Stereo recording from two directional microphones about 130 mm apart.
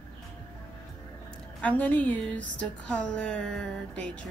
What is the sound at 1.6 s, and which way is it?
Speech, 10° left (ahead or behind).